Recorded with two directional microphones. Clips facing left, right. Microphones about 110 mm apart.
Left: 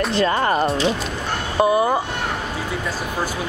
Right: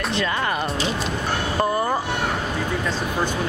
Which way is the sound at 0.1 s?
35° left (ahead or behind).